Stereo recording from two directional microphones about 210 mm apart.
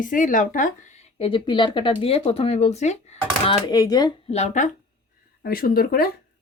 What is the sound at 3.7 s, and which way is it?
Speech, 20° left (ahead or behind).